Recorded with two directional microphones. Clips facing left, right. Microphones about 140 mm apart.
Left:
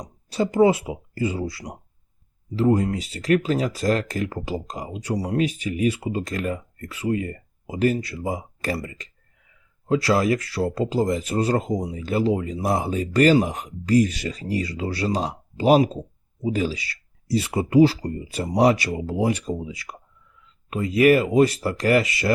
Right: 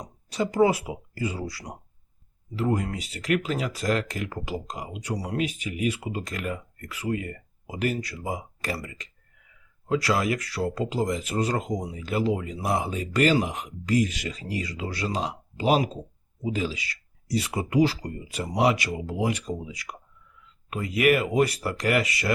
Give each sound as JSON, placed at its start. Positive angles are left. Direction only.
{"t": 0.3, "sound": "speech", "side_deg": 30}